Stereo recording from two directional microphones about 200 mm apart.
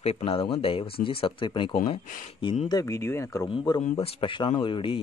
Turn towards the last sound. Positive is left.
turn(degrees=25)  # may be behind; listen again after turning